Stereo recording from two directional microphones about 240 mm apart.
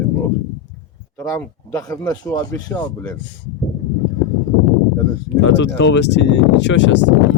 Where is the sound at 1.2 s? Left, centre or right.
Centre.